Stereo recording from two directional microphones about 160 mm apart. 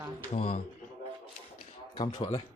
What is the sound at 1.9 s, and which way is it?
Speech, 25° left (ahead or behind).